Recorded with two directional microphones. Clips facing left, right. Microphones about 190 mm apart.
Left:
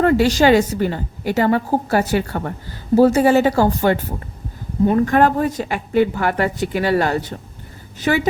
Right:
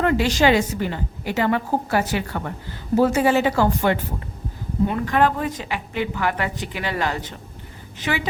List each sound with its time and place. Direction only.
0.0 s a woman's voice: 40° left (ahead or behind)